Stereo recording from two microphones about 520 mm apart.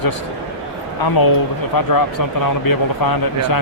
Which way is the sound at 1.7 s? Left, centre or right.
Left.